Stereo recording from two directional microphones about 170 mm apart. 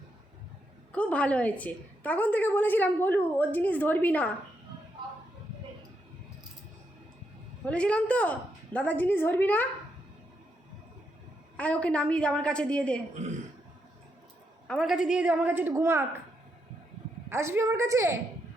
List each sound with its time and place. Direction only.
0.9 s a woman's voice: 10° left (ahead or behind)
7.6 s a woman's voice: 5° left (ahead or behind)
11.5 s a woman's voice: 10° left (ahead or behind)
14.7 s a woman's voice: centre (ahead or behind)
17.2 s a woman's voice: 15° right (ahead or behind)